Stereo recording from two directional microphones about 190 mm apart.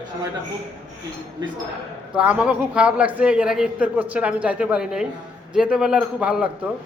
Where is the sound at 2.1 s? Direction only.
5° right (ahead or behind).